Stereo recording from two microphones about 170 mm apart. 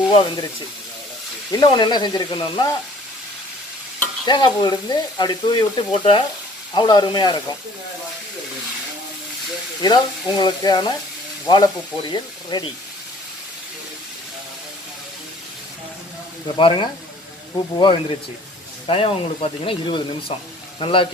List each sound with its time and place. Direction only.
0.1 s speech: 30° left (ahead or behind)
1.5 s speech: 25° left (ahead or behind)
4.3 s speech: 25° left (ahead or behind)
9.8 s speech: 25° left (ahead or behind)
16.5 s speech: 30° left (ahead or behind)